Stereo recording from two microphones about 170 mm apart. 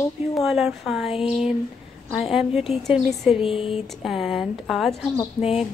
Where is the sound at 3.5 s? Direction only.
30° left (ahead or behind).